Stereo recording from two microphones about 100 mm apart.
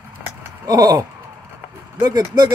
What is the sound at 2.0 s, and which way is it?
Speech, 40° right (ahead or behind).